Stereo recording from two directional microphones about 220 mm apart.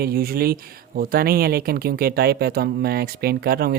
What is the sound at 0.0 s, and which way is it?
Speech, 45° right (ahead or behind).